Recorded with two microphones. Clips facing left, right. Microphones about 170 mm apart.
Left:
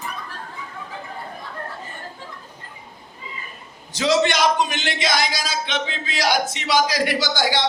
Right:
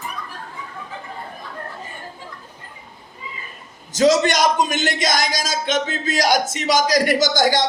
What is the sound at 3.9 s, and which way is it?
A man's voice, 45° right (ahead or behind).